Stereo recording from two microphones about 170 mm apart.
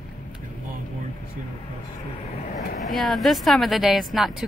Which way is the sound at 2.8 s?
Centre (ahead or behind).